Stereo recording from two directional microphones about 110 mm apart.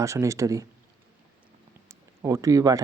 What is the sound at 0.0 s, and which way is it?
Speech, 30° right (ahead or behind).